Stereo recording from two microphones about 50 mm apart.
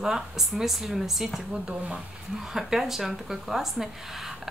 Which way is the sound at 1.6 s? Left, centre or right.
Centre.